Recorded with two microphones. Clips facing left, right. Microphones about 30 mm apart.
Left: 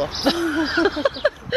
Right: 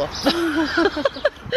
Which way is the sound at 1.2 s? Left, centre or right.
Centre.